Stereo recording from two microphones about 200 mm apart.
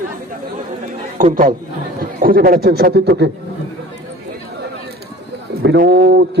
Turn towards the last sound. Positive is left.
turn(degrees=-55)  # may be behind; listen again after turning